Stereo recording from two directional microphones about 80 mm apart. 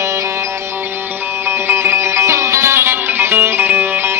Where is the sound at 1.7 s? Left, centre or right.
Right.